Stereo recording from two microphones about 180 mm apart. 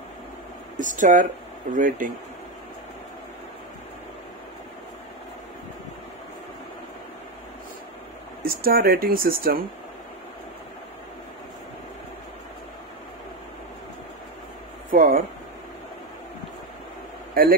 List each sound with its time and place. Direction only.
0.7 s speech: 45° right (ahead or behind)
8.5 s speech: 55° right (ahead or behind)
14.9 s speech: 50° right (ahead or behind)
17.3 s a sound: 55° right (ahead or behind)